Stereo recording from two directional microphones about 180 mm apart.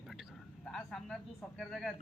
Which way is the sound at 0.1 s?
Centre (ahead or behind).